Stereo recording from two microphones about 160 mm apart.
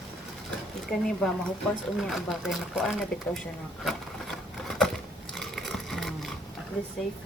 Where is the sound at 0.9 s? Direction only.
5° left (ahead or behind).